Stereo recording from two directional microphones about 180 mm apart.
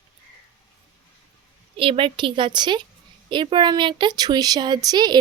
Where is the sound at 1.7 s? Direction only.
30° right (ahead or behind).